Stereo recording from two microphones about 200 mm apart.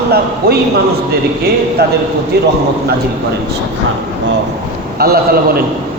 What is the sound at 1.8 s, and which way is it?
Speech, 55° right (ahead or behind).